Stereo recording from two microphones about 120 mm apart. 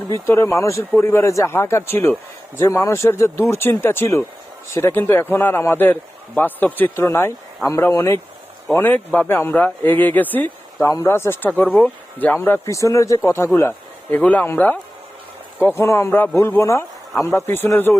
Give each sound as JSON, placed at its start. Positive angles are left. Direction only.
{"t": 0.1, "sound": "a man's voice", "side_deg": 25}
{"t": 12.6, "sound": "a man's voice", "side_deg": 25}